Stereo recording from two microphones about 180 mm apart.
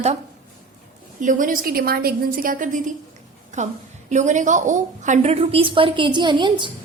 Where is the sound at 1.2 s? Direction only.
45° right (ahead or behind); by 6.7 s 25° right (ahead or behind).